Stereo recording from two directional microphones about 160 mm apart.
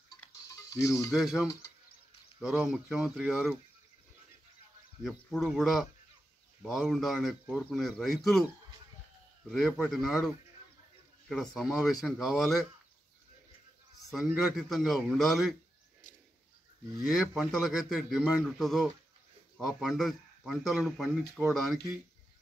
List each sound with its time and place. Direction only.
0.5 s music: 20° left (ahead or behind)
0.9 s speech: centre (ahead or behind)
5.0 s speech: centre (ahead or behind)
9.5 s speech: centre (ahead or behind)
14.1 s speech: centre (ahead or behind)
17.0 s speech: 5° right (ahead or behind)